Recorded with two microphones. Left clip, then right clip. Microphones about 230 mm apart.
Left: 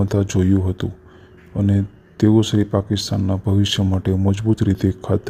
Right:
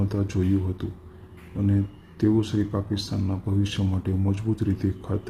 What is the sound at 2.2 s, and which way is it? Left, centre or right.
Speech, left.